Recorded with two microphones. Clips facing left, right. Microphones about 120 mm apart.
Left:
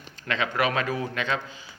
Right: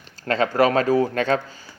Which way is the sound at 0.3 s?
40° right (ahead or behind).